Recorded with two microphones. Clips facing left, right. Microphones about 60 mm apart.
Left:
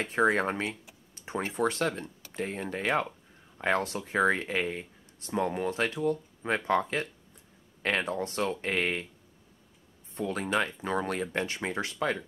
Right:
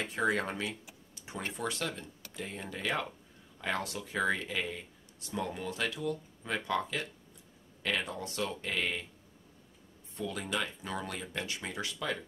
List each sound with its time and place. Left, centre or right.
0.0 s speech: left
1.1 s a sound: left
1.5 s speech: left
10.1 s speech: left